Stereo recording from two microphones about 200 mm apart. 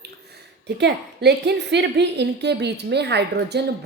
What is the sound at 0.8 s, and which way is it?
A woman's voice, 55° right (ahead or behind).